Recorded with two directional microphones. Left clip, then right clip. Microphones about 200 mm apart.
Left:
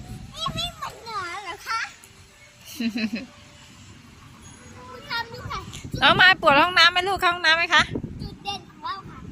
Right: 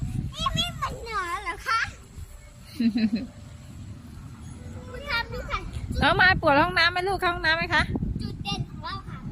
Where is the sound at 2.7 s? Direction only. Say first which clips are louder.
Right 2 dB; centre (ahead or behind).